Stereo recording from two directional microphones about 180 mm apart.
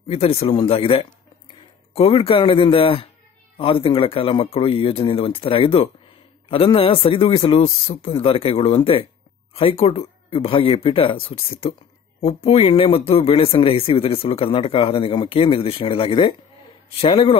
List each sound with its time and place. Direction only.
0.1 s speech: 35° left (ahead or behind)